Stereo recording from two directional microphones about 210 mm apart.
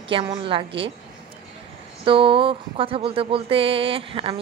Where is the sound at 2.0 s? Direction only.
25° right (ahead or behind).